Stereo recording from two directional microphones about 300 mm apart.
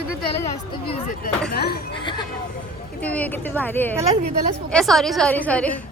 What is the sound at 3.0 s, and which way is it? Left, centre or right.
A woman's voice, centre.